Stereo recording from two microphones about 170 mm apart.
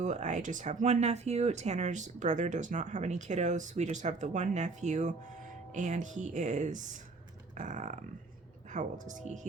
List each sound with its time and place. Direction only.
0.0 s speech: 45° right (ahead or behind)
7.5 s a sound: 45° right (ahead or behind)
8.7 s speech: 45° right (ahead or behind)